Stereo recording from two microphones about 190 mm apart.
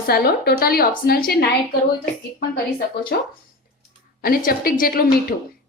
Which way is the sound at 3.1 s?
60° left (ahead or behind).